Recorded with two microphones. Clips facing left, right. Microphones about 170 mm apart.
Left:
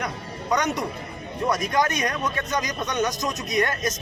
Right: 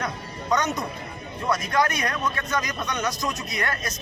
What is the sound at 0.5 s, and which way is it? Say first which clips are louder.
A man's voice: left 1 dB; 10° left (ahead or behind).